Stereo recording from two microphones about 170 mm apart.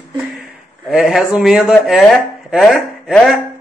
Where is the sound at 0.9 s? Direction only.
5° right (ahead or behind).